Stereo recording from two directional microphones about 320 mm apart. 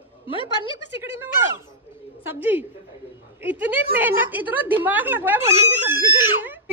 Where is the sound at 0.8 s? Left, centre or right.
Centre.